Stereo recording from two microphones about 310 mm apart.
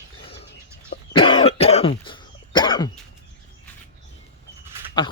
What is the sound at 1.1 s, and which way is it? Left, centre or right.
Cough, centre.